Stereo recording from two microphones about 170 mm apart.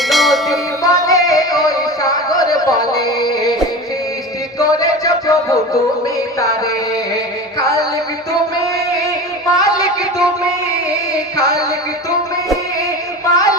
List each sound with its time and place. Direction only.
0.1 s bell: centre (ahead or behind)
0.8 s music: 20° left (ahead or behind)
4.6 s music: 20° left (ahead or behind)
7.6 s music: 20° left (ahead or behind)
9.6 s a sound: 20° left (ahead or behind)
11.1 s music: 20° left (ahead or behind)
13.3 s a sound: 20° left (ahead or behind)